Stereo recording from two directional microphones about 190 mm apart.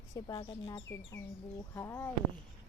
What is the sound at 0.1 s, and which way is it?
Speech, 20° left (ahead or behind).